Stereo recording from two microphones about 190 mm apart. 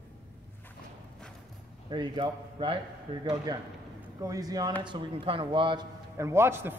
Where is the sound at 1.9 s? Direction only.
25° right (ahead or behind).